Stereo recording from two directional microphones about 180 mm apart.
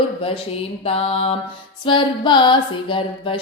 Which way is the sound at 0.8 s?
30° left (ahead or behind).